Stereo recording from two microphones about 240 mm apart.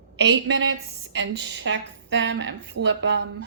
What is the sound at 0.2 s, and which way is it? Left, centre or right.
Speech, right.